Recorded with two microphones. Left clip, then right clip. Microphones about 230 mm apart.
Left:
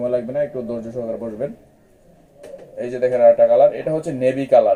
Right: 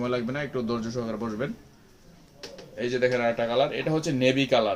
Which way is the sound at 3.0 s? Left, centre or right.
Right.